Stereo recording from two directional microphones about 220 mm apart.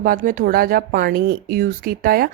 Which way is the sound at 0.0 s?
40° right (ahead or behind).